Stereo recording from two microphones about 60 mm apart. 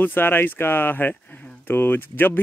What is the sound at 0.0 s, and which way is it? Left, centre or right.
Speech, left.